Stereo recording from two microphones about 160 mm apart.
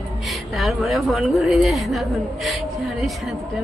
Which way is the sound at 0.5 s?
Centre (ahead or behind).